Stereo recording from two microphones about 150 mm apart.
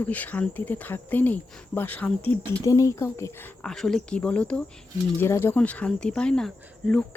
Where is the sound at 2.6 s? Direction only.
20° left (ahead or behind).